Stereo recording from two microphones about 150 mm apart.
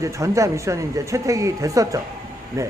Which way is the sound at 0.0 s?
20° right (ahead or behind).